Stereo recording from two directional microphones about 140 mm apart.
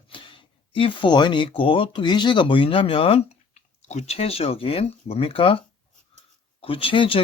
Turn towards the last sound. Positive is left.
turn(degrees=40)  # may be behind; listen again after turning